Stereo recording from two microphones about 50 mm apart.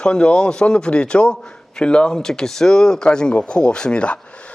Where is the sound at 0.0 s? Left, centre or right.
Centre.